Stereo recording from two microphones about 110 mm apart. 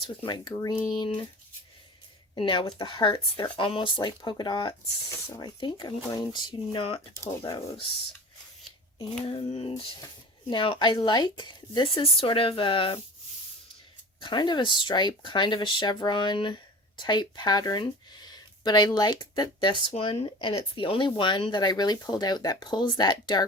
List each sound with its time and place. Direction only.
0.2 s speech: 40° left (ahead or behind)
2.3 s speech: 50° left (ahead or behind)
6.5 s speech: 55° left (ahead or behind)
9.0 s female singing: 60° left (ahead or behind)
10.5 s speech: 50° left (ahead or behind)
12.1 s speech: 55° left (ahead or behind)
14.2 s speech: 45° left (ahead or behind)